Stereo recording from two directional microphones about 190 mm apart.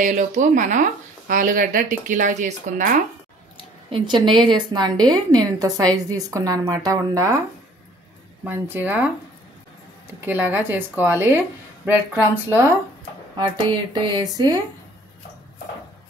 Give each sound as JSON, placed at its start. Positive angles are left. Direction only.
{"t": 0.0, "sound": "speech", "side_deg": -40}
{"t": 3.5, "sound": "speech", "side_deg": -25}
{"t": 8.5, "sound": "a woman's voice", "side_deg": -10}
{"t": 10.2, "sound": "a woman's voice", "side_deg": -10}
{"t": 13.4, "sound": "speech", "side_deg": -25}